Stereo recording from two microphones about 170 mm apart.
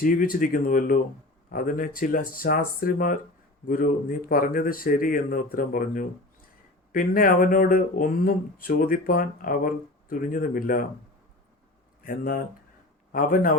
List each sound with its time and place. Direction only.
0.0 s speech: 55° left (ahead or behind)
4.3 s speech: 55° left (ahead or behind)
12.0 s speech: 55° left (ahead or behind)